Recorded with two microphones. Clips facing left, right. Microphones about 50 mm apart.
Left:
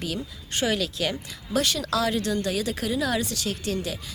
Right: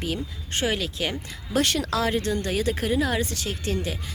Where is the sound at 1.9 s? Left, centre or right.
Right.